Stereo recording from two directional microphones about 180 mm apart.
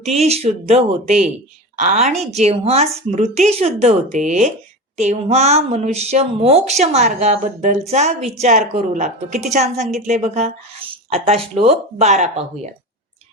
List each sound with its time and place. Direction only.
0.0 s a woman's voice: 35° right (ahead or behind)